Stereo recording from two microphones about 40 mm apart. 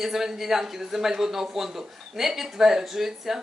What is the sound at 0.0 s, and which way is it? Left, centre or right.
A woman's voice, centre.